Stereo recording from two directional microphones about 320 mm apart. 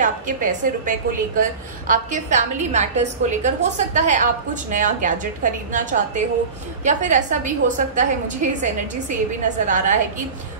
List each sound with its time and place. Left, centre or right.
0.0 s a woman's voice: right